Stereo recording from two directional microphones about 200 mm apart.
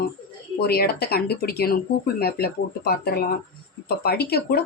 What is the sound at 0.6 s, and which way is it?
Speech, 50° left (ahead or behind).